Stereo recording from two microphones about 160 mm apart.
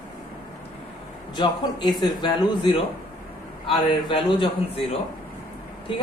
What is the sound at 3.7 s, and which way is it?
A man's voice, 30° left (ahead or behind).